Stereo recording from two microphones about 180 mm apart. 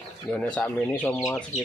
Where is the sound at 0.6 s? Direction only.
10° left (ahead or behind).